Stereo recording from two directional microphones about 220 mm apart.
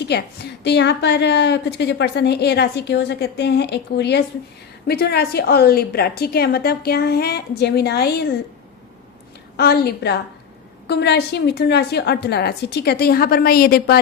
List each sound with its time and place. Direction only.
0.1 s a woman's voice: 50° left (ahead or behind)
9.6 s a woman's voice: 45° left (ahead or behind)